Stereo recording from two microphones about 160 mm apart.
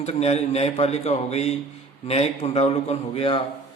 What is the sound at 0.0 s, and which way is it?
A man's voice, 40° left (ahead or behind).